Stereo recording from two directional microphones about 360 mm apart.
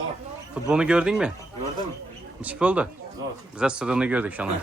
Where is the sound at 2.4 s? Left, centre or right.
Centre.